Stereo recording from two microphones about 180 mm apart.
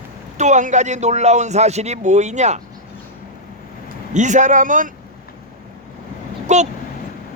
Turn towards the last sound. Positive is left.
turn(degrees=-40)  # may be behind; listen again after turning